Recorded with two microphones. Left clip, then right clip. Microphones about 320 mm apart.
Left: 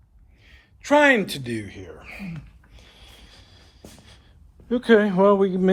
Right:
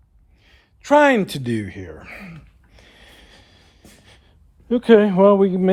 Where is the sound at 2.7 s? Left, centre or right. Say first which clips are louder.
Right 2 dB; right.